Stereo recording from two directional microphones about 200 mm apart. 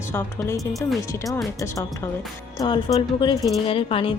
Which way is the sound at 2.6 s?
20° left (ahead or behind).